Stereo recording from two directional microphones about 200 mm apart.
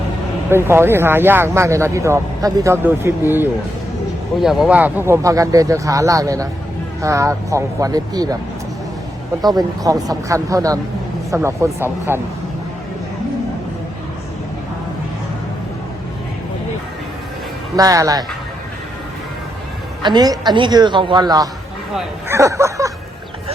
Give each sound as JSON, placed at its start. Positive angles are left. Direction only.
{"t": 0.5, "sound": "speech", "side_deg": -10}
{"t": 9.4, "sound": "speech", "side_deg": -20}
{"t": 17.7, "sound": "speech", "side_deg": -15}
{"t": 20.0, "sound": "a woman's voice", "side_deg": -20}